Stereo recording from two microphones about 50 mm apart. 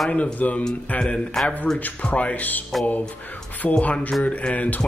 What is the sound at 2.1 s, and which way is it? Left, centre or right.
Speech, left.